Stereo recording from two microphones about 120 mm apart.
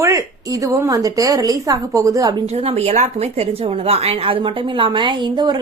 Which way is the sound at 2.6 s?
60° right (ahead or behind).